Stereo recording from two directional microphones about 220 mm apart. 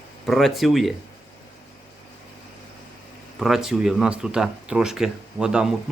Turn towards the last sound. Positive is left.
turn(degrees=-5)  # may be behind; listen again after turning